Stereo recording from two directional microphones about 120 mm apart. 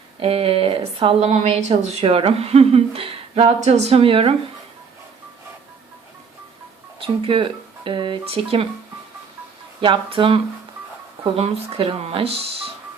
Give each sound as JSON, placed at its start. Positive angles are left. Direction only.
{"t": 0.2, "sound": "a woman's voice", "side_deg": -50}
{"t": 3.6, "sound": "speech", "side_deg": -65}
{"t": 7.0, "sound": "a woman's voice", "side_deg": -45}
{"t": 9.8, "sound": "a woman's voice", "side_deg": -45}